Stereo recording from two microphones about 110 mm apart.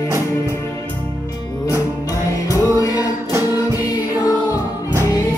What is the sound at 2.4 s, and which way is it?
Music, 30° left (ahead or behind).